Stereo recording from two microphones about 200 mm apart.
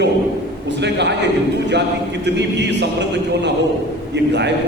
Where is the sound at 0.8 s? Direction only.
60° right (ahead or behind).